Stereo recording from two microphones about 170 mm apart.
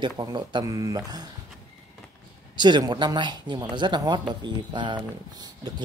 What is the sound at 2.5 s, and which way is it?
Speech, 25° right (ahead or behind).